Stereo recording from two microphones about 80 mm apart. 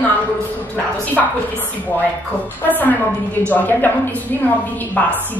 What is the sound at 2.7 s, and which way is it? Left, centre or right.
A woman's voice, left.